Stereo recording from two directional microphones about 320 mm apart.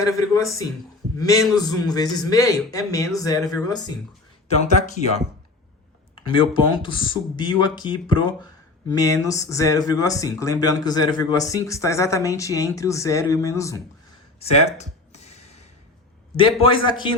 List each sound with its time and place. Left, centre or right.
0.0 s speech: centre
14.3 s a sound: centre
16.4 s speech: centre